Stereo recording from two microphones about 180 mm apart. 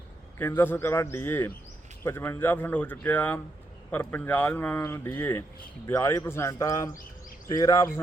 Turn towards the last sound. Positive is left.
turn(degrees=15)  # may be behind; listen again after turning